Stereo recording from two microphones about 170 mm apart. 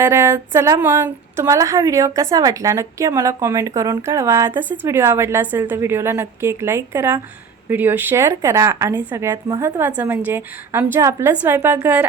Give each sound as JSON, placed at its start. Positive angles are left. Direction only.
{"t": 0.0, "sound": "a woman's voice", "side_deg": -15}